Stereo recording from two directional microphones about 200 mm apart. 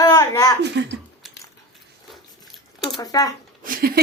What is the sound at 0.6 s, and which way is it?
Speech, 60° right (ahead or behind).